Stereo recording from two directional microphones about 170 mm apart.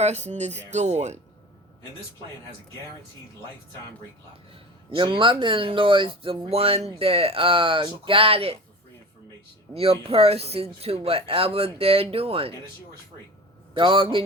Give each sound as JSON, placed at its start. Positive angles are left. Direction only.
{"t": 0.0, "sound": "speech", "side_deg": -40}
{"t": 4.5, "sound": "speech", "side_deg": -30}
{"t": 9.7, "sound": "speech", "side_deg": -35}
{"t": 13.7, "sound": "speech", "side_deg": -30}